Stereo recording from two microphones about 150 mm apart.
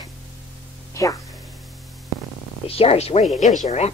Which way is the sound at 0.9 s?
20° left (ahead or behind).